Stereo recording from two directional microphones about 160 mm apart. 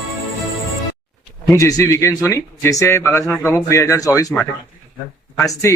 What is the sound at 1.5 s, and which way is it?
A man's voice, 20° left (ahead or behind).